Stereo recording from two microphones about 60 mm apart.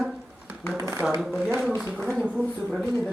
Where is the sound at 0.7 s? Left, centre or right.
Right.